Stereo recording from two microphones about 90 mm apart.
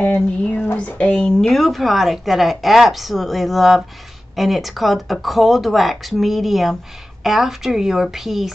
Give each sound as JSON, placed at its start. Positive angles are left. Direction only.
{"t": 0.0, "sound": "a woman's voice", "side_deg": 20}